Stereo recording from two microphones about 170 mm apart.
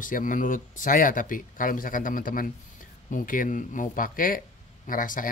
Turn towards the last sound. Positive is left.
turn(degrees=50)  # may be behind; listen again after turning